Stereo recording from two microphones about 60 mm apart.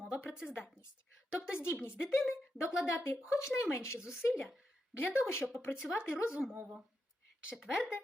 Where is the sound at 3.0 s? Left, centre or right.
Left.